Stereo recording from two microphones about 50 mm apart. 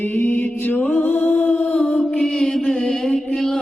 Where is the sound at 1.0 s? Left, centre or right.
Left.